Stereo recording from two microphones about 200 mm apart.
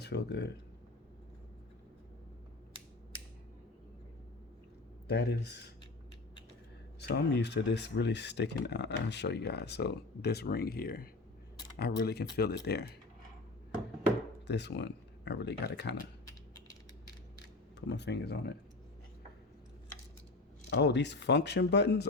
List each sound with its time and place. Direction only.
0.0 s speech: 55° left (ahead or behind)
5.0 s speech: 55° left (ahead or behind)
7.0 s speech: 55° left (ahead or behind)
14.4 s speech: 60° left (ahead or behind)
16.6 s mechanisms: 20° left (ahead or behind)
17.7 s speech: 60° left (ahead or behind)
20.7 s speech: 60° left (ahead or behind)